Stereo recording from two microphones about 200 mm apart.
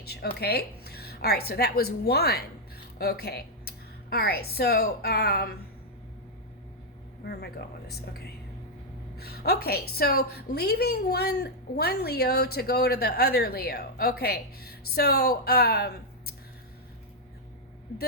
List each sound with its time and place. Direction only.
0.0 s a woman's voice: 50° left (ahead or behind)
7.3 s a woman's voice: 55° left (ahead or behind)